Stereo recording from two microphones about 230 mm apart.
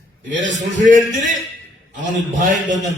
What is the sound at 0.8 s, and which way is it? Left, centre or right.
A man's voice, right.